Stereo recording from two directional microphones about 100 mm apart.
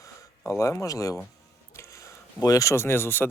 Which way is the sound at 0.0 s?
30° left (ahead or behind).